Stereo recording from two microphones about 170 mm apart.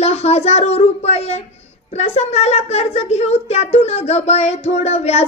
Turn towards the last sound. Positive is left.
turn(degrees=40)  # may be behind; listen again after turning